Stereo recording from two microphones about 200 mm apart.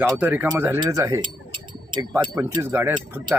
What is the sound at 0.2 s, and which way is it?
Speech, 5° right (ahead or behind).